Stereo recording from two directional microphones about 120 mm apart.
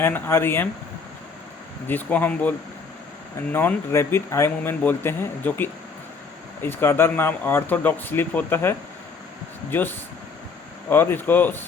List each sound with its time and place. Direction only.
0.0 s speech: 20° left (ahead or behind)
1.9 s speech: 15° left (ahead or behind)
3.5 s speech: 20° left (ahead or behind)